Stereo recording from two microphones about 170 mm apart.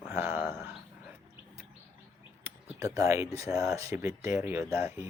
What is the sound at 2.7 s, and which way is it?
Speech, 20° right (ahead or behind).